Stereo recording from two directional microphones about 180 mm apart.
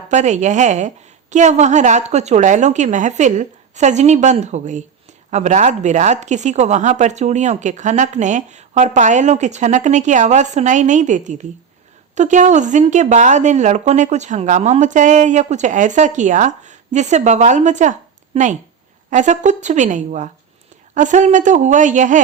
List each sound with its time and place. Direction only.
0.1 s a woman's voice: 40° right (ahead or behind)
19.1 s a woman's voice: 45° right (ahead or behind)